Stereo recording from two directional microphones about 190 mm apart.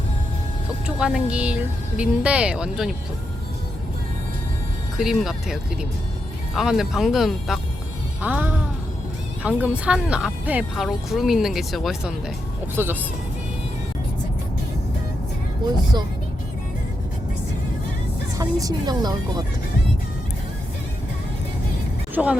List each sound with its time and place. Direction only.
0.9 s speech: 5° right (ahead or behind)
4.9 s speech: centre (ahead or behind)
6.6 s speech: centre (ahead or behind)
8.2 s music: 10° right (ahead or behind)
9.4 s speech: 5° right (ahead or behind)
12.7 s music: 10° right (ahead or behind)
18.3 s speech: 20° right (ahead or behind)
22.1 s speech: 10° right (ahead or behind)